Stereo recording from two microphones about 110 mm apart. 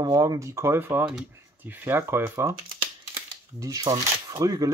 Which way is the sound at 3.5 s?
35° right (ahead or behind).